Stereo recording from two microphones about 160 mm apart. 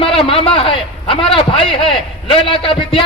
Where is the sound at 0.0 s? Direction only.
35° left (ahead or behind).